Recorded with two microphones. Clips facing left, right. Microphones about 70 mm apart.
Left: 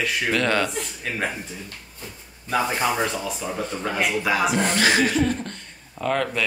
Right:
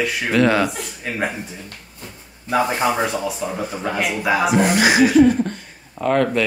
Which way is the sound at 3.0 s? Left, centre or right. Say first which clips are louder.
Right 4 dB; centre.